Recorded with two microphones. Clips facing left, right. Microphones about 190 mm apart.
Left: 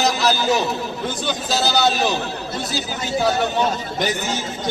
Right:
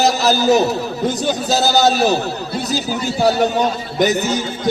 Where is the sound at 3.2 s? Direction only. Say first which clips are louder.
Right 4 dB; 40° right (ahead or behind).